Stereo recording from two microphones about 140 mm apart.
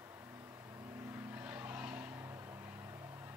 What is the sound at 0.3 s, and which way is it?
Vehicle, 15° right (ahead or behind).